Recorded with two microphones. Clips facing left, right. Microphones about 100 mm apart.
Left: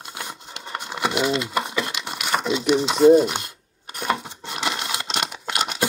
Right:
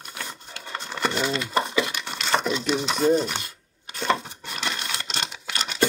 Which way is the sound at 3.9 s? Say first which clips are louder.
Right 1 dB; 15° left (ahead or behind).